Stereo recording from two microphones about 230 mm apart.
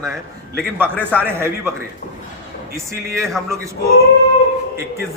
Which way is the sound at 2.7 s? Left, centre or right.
Centre.